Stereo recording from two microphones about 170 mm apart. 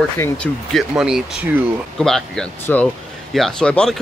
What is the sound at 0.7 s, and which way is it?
Speech, 5° right (ahead or behind).